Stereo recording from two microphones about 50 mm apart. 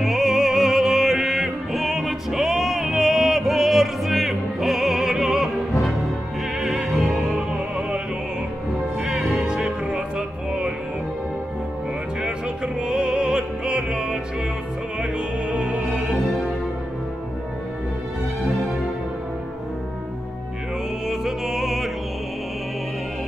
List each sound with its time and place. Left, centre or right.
0.0 s music: centre
7.3 s music: centre
9.4 s music: centre
12.2 s opera: centre
15.5 s music: right
21.1 s music: centre